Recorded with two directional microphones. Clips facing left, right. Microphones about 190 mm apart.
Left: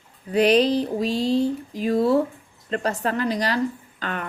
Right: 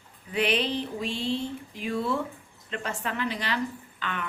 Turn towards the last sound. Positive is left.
turn(degrees=40)  # may be behind; listen again after turning